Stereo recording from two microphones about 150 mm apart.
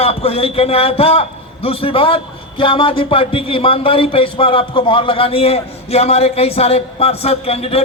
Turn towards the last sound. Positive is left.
turn(degrees=40)  # may be behind; listen again after turning